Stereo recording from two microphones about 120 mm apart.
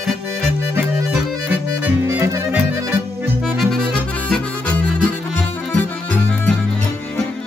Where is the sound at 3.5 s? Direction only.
5° left (ahead or behind).